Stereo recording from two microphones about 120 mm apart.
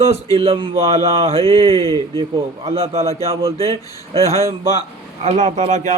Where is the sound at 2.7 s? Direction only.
60° right (ahead or behind).